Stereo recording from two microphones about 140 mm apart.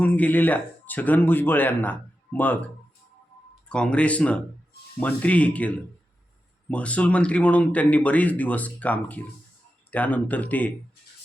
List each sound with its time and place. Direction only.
0.0 s speech: 10° left (ahead or behind)
3.7 s speech: 5° left (ahead or behind)